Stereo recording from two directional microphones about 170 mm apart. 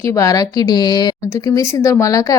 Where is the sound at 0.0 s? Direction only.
20° left (ahead or behind).